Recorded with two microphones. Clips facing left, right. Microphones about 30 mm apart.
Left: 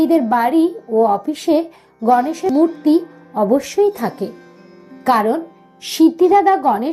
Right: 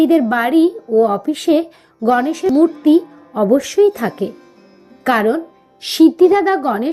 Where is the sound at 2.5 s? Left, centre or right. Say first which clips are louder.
Right 3 dB; centre.